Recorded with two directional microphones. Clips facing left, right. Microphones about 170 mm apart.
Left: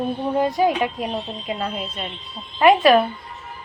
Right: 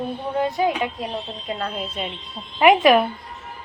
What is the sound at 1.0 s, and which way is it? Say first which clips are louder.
Speech: left 2 dB; 10° left (ahead or behind).